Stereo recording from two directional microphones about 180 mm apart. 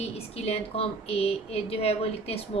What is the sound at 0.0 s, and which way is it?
A woman's voice, 35° left (ahead or behind).